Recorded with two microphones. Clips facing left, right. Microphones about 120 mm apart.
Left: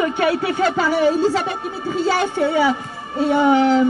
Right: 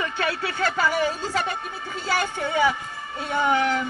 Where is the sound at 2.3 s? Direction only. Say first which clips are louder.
Left 8 dB; 40° left (ahead or behind).